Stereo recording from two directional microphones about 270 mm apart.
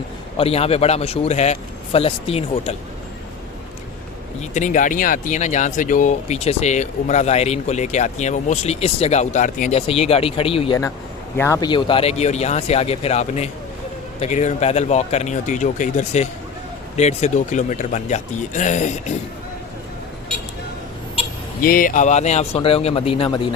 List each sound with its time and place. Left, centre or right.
0.3 s speech: left
4.4 s speech: left
21.6 s speech: left